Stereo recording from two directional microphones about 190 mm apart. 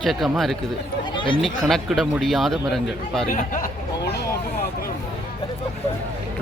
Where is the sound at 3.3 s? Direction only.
45° left (ahead or behind).